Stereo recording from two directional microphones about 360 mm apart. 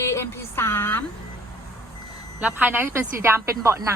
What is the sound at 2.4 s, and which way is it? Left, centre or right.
A woman's voice, centre.